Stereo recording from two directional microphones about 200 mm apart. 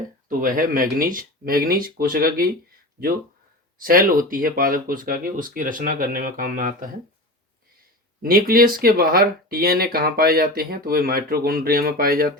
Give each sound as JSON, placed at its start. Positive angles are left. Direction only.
{"t": 0.3, "sound": "speech", "side_deg": -45}
{"t": 3.8, "sound": "speech", "side_deg": -45}
{"t": 8.2, "sound": "speech", "side_deg": -45}